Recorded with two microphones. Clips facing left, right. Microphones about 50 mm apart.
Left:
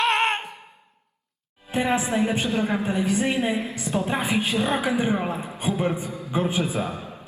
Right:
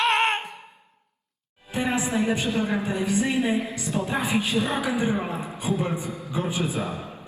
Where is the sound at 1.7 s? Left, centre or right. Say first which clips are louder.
Left 2 dB; left.